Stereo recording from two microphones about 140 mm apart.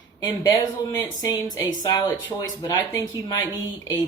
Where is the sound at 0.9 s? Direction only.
25° left (ahead or behind).